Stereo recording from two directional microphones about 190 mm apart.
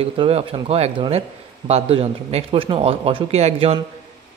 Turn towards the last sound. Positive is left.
turn(degrees=-30)  # may be behind; listen again after turning